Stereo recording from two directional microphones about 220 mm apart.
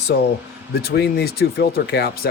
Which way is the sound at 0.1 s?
45° left (ahead or behind).